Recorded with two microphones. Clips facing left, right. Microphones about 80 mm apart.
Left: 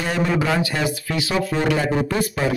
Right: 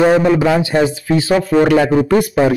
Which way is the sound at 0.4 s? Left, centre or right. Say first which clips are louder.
Right 8 dB; right.